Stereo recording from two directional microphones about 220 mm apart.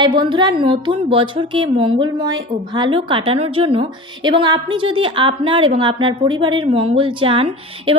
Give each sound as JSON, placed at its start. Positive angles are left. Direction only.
{"t": 0.0, "sound": "a woman's voice", "side_deg": -20}